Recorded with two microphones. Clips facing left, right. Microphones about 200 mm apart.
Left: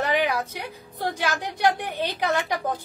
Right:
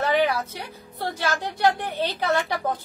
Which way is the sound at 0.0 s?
45° right (ahead or behind).